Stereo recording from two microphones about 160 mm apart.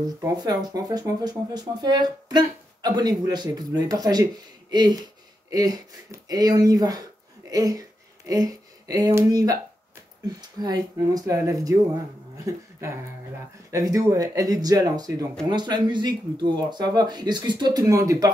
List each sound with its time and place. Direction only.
0.0 s speech: 25° right (ahead or behind)